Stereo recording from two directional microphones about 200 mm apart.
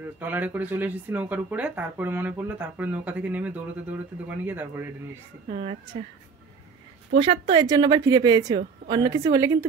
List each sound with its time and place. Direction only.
0.0 s speech: 10° right (ahead or behind)
5.5 s speech: 30° right (ahead or behind)
7.2 s a woman's voice: 25° right (ahead or behind)